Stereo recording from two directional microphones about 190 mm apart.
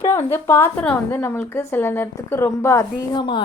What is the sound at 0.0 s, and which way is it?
A woman's voice, 15° left (ahead or behind).